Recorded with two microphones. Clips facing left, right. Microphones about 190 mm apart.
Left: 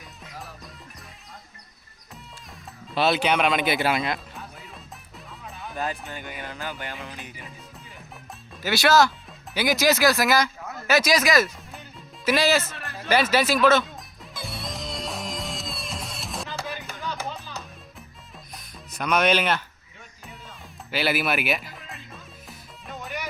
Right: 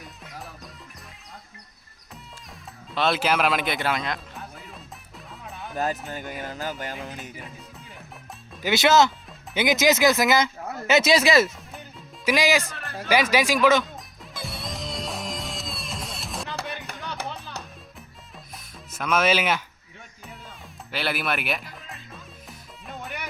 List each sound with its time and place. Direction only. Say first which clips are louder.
2.9 s music: left 1 dB; 5° left (ahead or behind)
5.7 s speech: right 3 dB; 40° right (ahead or behind)
7.0 s music: right 2 dB; 40° right (ahead or behind)
8.6 s speech: right 1 dB; 20° right (ahead or behind)
12.2 s speech: even; 15° right (ahead or behind)
14.3 s music: even; centre (ahead or behind)
16.5 s music: even; 65° right (ahead or behind)
18.5 s music: left 1 dB; centre (ahead or behind)
20.2 s music: even; centre (ahead or behind)